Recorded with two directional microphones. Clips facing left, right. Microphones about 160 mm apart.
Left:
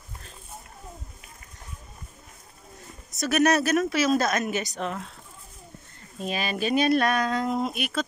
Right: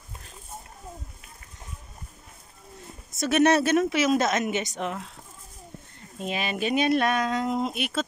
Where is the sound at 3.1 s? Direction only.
25° right (ahead or behind).